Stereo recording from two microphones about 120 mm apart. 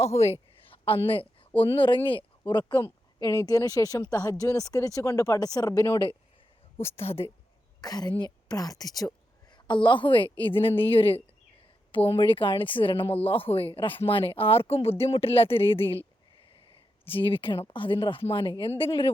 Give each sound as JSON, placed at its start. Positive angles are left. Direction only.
{"t": 0.0, "sound": "a woman's voice", "side_deg": 60}
{"t": 6.8, "sound": "speech", "side_deg": 55}
{"t": 7.8, "sound": "a woman's voice", "side_deg": 35}
{"t": 17.1, "sound": "speech", "side_deg": 50}